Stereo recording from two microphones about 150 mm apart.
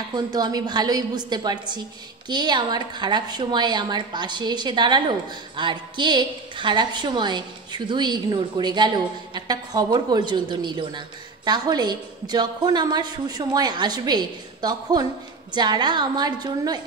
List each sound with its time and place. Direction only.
0.1 s speech: 25° right (ahead or behind)